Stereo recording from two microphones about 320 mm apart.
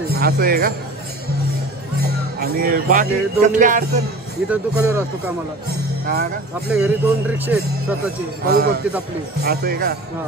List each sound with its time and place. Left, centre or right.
0.2 s music: right
2.4 s music: right
4.5 s speech: centre
6.7 s speech: centre
8.5 s music: right